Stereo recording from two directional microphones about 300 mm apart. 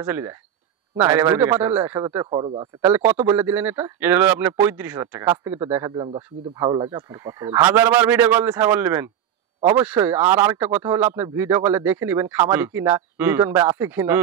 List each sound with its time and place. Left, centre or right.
0.0 s speech: centre
2.8 s speech: centre